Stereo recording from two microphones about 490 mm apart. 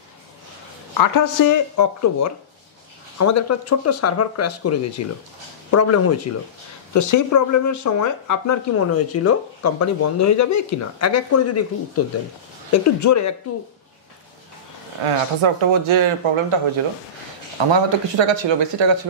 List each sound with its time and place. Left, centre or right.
0.9 s speech: left
15.0 s speech: right
17.8 s speech: right